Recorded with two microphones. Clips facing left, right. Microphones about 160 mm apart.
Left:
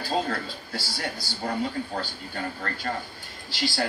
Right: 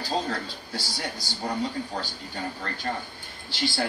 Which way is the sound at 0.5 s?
15° right (ahead or behind).